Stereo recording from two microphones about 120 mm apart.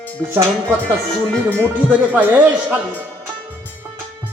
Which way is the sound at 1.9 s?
15° right (ahead or behind).